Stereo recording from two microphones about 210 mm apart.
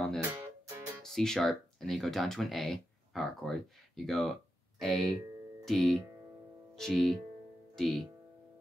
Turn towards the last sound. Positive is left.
turn(degrees=0)  # may be behind; listen again after turning